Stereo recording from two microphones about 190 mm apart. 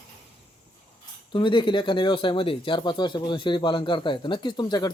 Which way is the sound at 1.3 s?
25° left (ahead or behind).